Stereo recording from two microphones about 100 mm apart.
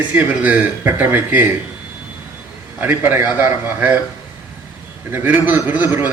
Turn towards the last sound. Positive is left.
turn(degrees=-20)  # may be behind; listen again after turning